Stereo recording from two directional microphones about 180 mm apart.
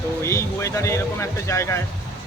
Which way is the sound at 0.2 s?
15° left (ahead or behind).